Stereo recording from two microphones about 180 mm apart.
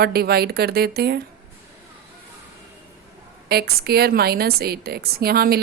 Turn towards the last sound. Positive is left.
turn(degrees=-55)  # may be behind; listen again after turning